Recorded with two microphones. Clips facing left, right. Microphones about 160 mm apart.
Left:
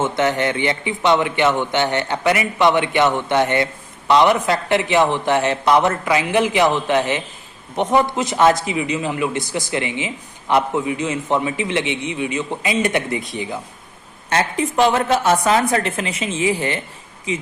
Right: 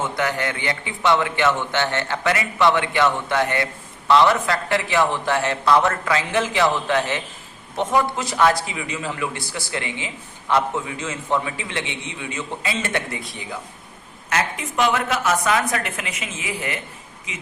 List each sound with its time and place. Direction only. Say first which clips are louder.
0.0 s a man's voice: left 5 dB; 25° left (ahead or behind)
14.3 s a woman's voice: left 5 dB; 30° left (ahead or behind)